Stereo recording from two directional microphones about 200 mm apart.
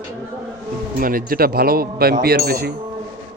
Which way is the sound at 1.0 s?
45° right (ahead or behind).